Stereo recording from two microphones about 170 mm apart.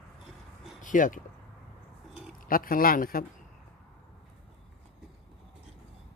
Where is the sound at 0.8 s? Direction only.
50° left (ahead or behind).